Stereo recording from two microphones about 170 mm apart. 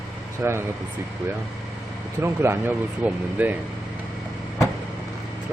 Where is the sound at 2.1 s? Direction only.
15° right (ahead or behind).